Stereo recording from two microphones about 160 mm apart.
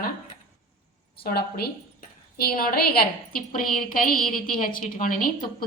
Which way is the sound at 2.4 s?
70° left (ahead or behind).